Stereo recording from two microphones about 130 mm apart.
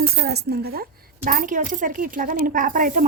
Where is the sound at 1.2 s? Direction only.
90° right.